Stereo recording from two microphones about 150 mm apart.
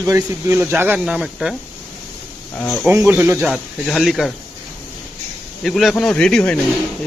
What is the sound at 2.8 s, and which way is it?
Speech, 15° right (ahead or behind).